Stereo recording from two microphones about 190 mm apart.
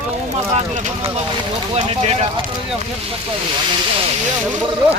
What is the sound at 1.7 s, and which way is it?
Speech, 35° right (ahead or behind).